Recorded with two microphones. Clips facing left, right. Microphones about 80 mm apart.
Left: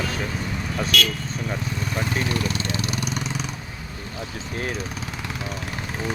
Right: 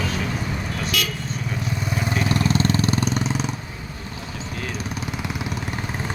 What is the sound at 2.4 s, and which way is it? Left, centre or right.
Vehicle, right.